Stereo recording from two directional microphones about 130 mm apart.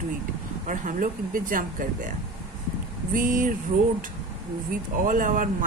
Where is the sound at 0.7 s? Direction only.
85° right.